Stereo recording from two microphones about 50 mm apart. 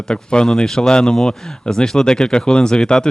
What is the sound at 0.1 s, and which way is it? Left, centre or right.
Speech, centre.